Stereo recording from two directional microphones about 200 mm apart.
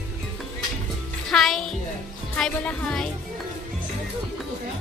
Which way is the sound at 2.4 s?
5° left (ahead or behind).